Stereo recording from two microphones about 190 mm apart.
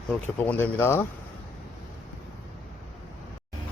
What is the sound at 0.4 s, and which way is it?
Speech, 10° left (ahead or behind).